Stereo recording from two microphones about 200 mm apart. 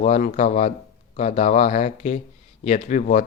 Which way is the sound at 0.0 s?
40° left (ahead or behind).